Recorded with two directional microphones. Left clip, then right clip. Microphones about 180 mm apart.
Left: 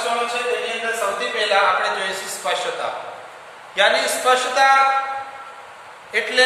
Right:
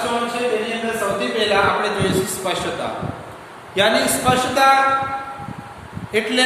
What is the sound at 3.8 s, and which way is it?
Speech, 15° right (ahead or behind).